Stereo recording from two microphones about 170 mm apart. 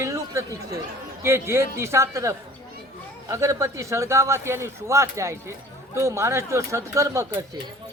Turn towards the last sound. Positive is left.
turn(degrees=-20)  # may be behind; listen again after turning